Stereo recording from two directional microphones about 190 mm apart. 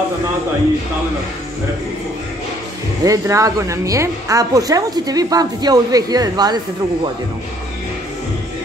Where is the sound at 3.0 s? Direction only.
15° right (ahead or behind).